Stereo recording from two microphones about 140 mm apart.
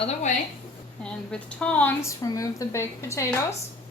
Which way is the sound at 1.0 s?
5° left (ahead or behind).